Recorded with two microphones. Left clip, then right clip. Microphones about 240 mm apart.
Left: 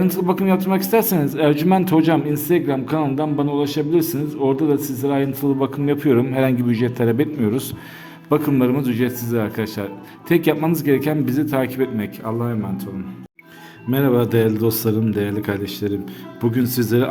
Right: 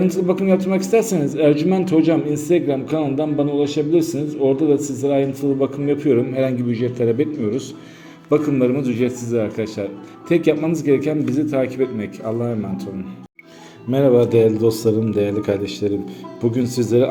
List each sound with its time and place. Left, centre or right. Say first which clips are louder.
0.0 s a man's voice: right 1 dB; left
14.0 s a man's voice: right 4 dB; centre
15.8 s speech: right 2 dB; left
16.6 s a man's voice: right 3 dB; left